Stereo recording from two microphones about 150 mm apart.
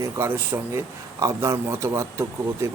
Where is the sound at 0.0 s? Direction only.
15° right (ahead or behind).